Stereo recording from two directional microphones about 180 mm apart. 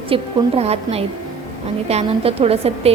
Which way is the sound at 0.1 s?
35° right (ahead or behind).